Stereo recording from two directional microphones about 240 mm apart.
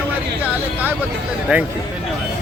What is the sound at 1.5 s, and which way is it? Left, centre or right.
Speech, centre.